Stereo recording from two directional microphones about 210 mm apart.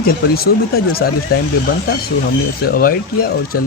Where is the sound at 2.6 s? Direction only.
45° left (ahead or behind).